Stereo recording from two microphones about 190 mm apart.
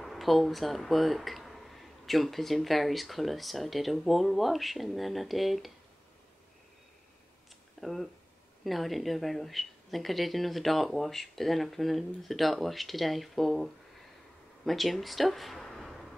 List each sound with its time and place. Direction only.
0.0 s speech: centre (ahead or behind)
7.8 s speech: centre (ahead or behind)